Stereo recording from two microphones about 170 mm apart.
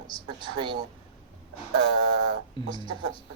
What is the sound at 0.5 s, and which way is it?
Speech, 25° right (ahead or behind).